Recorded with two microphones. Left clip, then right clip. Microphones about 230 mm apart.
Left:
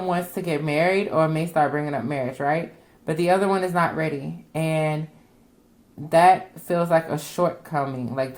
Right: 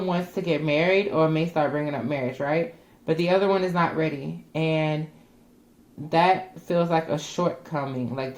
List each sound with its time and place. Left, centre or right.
0.1 s speech: left
6.1 s speech: left